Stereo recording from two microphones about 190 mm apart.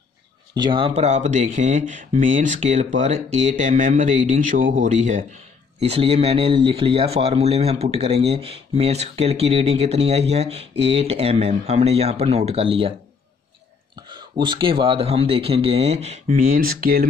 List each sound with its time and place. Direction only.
0.6 s speech: 25° right (ahead or behind)
14.0 s speech: 25° right (ahead or behind); by 17.0 s 50° right (ahead or behind)